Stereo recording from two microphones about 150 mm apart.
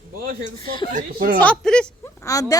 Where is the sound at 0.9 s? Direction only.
70° right (ahead or behind).